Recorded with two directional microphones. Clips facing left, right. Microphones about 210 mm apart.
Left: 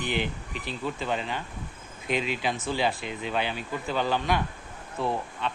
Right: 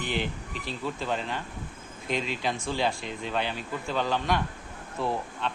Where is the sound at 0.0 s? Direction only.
Centre (ahead or behind).